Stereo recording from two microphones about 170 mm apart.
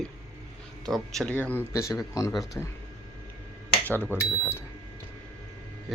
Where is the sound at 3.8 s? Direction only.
10° left (ahead or behind).